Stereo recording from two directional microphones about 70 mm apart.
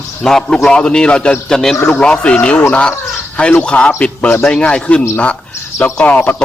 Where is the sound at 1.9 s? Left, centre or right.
Centre.